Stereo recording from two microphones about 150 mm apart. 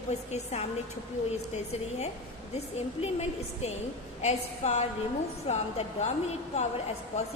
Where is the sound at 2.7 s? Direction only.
45° left (ahead or behind).